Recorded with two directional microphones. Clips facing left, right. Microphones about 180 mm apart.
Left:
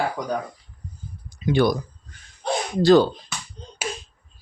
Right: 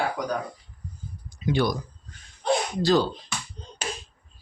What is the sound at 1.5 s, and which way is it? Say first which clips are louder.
Speech: left 5 dB; 55° left (ahead or behind).